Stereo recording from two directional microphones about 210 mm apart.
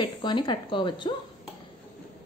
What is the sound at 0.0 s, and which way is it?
A woman's voice, 20° left (ahead or behind).